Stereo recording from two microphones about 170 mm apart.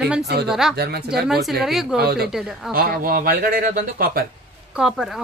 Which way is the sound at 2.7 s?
60° right (ahead or behind).